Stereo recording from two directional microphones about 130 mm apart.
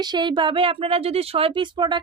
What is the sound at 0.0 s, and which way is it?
Speech, 35° right (ahead or behind).